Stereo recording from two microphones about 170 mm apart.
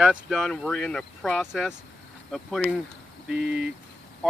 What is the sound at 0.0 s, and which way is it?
Speech, 5° right (ahead or behind).